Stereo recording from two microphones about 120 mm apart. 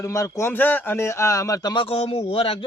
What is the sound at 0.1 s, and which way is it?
A man's voice, 25° left (ahead or behind).